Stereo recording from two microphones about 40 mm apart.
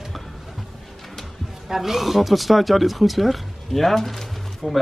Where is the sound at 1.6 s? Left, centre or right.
Centre.